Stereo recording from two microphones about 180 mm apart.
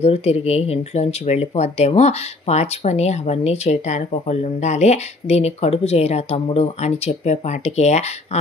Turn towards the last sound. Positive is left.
turn(degrees=40)  # may be behind; listen again after turning